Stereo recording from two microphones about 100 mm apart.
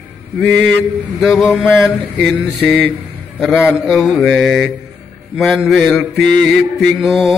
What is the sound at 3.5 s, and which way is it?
Music, 10° right (ahead or behind).